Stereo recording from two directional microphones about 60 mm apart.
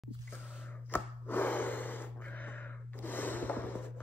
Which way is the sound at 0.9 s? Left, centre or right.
Left.